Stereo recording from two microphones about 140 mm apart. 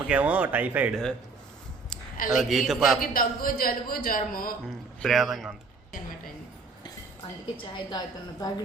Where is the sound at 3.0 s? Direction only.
90° left.